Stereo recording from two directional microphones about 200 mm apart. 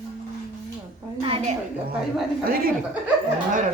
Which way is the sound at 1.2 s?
30° right (ahead or behind).